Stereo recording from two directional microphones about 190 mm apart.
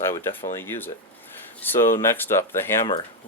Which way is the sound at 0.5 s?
10° left (ahead or behind).